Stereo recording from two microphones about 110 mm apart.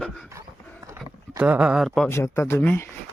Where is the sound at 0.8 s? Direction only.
30° right (ahead or behind).